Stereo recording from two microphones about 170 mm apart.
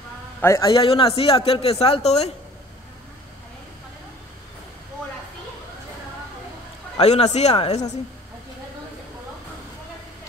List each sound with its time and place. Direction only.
0.4 s a man's voice: 15° left (ahead or behind)
0.7 s speech: 30° left (ahead or behind)
7.0 s speech: 40° left (ahead or behind)